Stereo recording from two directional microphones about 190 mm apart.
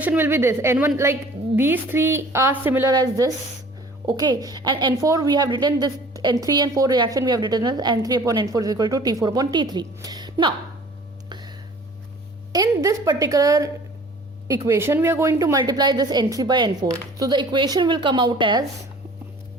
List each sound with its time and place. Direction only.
0.0 s a woman's voice: 10° right (ahead or behind)
12.5 s a woman's voice: 20° right (ahead or behind)